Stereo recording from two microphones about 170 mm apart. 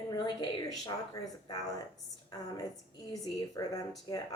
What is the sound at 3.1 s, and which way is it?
Speech, 20° left (ahead or behind).